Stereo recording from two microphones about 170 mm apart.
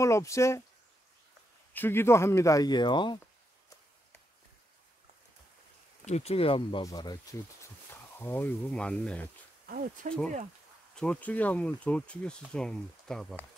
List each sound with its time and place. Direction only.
0.0 s speech: 15° left (ahead or behind)
1.7 s speech: 10° left (ahead or behind)
6.0 s speech: 40° left (ahead or behind); by 7.3 s 20° left (ahead or behind)
8.2 s speech: 10° left (ahead or behind)
10.0 s speech: 50° right (ahead or behind)
11.0 s speech: 10° left (ahead or behind)